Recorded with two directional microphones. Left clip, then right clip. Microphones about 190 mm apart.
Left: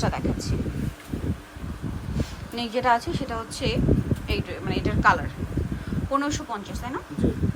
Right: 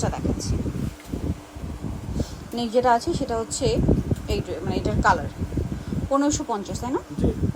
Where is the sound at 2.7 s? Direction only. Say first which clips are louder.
Right 3 dB; 25° right (ahead or behind).